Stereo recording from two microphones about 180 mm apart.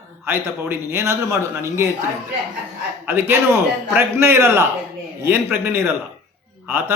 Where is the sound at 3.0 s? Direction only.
10° right (ahead or behind).